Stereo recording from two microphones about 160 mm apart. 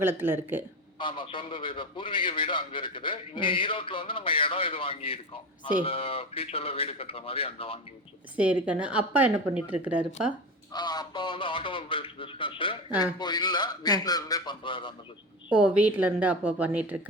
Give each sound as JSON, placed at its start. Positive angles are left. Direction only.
{"t": 0.0, "sound": "speech", "side_deg": -15}
{"t": 0.9, "sound": "a man's voice", "side_deg": 30}
{"t": 8.4, "sound": "speech", "side_deg": -10}
{"t": 10.7, "sound": "a man's voice", "side_deg": 25}
{"t": 15.4, "sound": "speech", "side_deg": -10}